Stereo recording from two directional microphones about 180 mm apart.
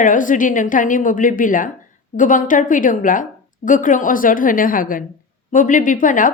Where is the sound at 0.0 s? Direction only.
45° left (ahead or behind).